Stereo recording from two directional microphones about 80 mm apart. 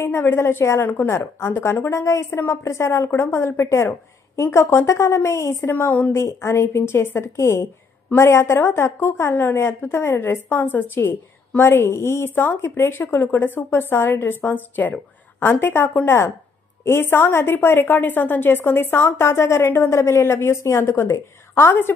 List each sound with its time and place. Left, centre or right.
0.0 s a woman's voice: left